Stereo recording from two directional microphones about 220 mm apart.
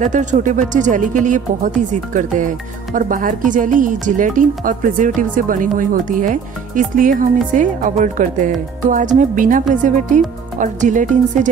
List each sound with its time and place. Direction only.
0.0 s speech: 35° right (ahead or behind)